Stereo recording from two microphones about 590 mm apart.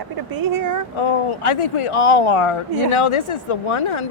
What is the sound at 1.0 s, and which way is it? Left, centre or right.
Speech, left.